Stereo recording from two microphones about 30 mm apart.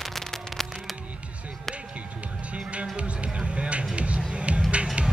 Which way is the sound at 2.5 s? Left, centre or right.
Right.